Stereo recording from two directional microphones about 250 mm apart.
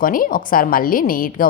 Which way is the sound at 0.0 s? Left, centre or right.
Left.